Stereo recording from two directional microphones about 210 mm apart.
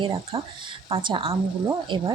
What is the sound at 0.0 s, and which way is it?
Speech, 25° right (ahead or behind).